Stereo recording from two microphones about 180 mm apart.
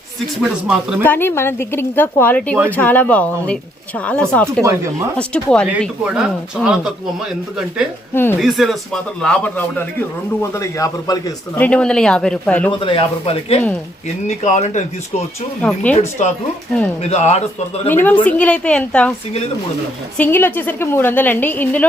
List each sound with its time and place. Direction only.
0.7 s a man's voice: 5° right (ahead or behind)
1.0 s a man's voice: 10° left (ahead or behind)
8.1 s speech: 10° left (ahead or behind)
8.4 s a man's voice: centre (ahead or behind); by 11.2 s 20° left (ahead or behind)
11.5 s a man's voice: 5° left (ahead or behind)
12.8 s speech: 30° left (ahead or behind)
15.6 s speech: 10° left (ahead or behind)
16.0 s speech: 40° left (ahead or behind)
17.8 s speech: 10° left (ahead or behind)
20.1 s speech: 10° left (ahead or behind)